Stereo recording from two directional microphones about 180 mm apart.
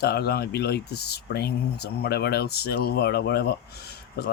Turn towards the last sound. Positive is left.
turn(degrees=60)  # may be behind; listen again after turning